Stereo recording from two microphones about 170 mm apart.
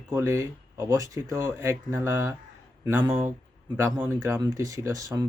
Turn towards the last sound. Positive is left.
turn(degrees=-20)  # may be behind; listen again after turning